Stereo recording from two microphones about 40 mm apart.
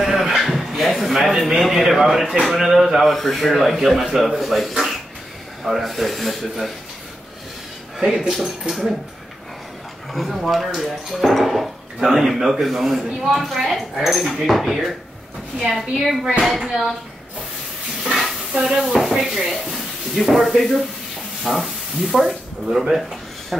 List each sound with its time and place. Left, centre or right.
0.0 s a sound: centre
1.6 s speech: centre
8.0 s speech: centre
10.1 s speech: centre
18.1 s speech: centre